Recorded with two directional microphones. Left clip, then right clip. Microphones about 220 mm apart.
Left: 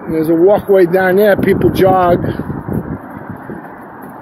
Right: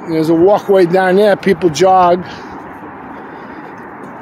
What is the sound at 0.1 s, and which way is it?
Speech, 20° right (ahead or behind).